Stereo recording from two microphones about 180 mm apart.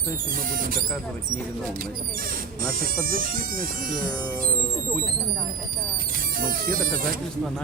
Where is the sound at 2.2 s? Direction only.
50° right (ahead or behind).